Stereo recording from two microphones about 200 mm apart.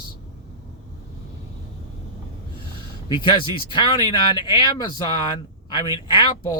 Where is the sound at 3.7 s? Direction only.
20° left (ahead or behind).